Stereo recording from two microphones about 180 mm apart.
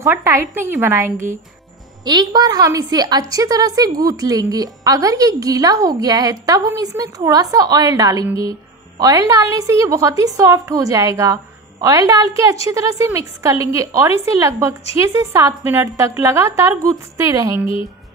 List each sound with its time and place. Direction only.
0.0 s a woman's voice: 15° right (ahead or behind)